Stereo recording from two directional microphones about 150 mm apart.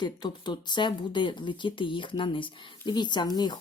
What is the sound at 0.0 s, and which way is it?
Speech, 30° left (ahead or behind).